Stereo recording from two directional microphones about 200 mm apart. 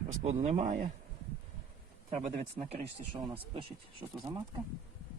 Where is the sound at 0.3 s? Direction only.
35° right (ahead or behind).